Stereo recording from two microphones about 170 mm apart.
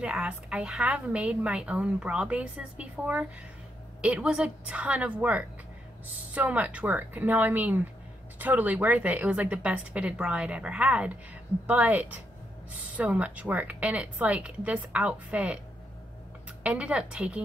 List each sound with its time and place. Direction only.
0.0 s a woman's voice: 5° right (ahead or behind)
16.6 s a woman's voice: 5° right (ahead or behind)